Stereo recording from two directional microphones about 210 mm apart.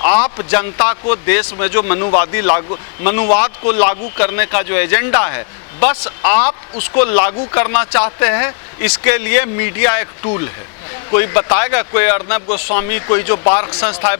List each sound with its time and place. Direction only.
0.0 s speech: 20° left (ahead or behind)